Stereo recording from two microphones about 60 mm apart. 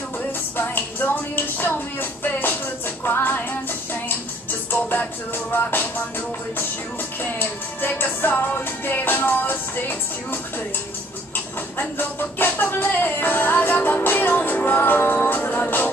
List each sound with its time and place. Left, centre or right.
0.6 s music: left
4.6 s music: left
7.2 s music: left